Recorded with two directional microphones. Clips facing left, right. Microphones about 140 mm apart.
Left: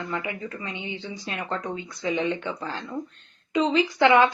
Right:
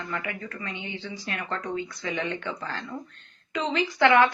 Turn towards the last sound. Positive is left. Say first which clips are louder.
# left 1 dB
turn(degrees=20)  # may be behind; listen again after turning